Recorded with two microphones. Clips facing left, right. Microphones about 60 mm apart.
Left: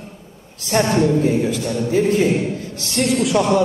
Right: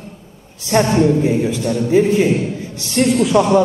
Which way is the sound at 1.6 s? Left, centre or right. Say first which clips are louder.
Right 6 dB; right.